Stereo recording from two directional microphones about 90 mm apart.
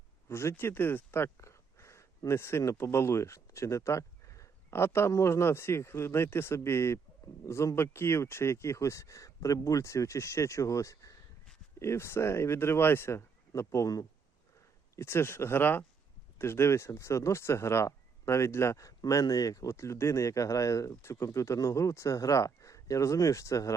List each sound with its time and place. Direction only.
0.3 s speech: 30° left (ahead or behind)
14.9 s speech: 25° left (ahead or behind)